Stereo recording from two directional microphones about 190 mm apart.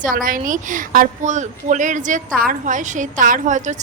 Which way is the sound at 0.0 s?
50° right (ahead or behind).